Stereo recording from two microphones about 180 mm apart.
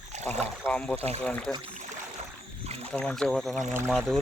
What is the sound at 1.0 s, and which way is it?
Speech, 35° right (ahead or behind).